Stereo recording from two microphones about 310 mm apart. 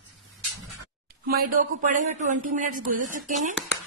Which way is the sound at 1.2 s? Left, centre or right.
Right.